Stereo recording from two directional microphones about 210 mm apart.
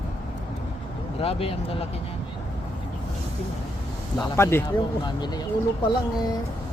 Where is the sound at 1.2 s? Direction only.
25° left (ahead or behind).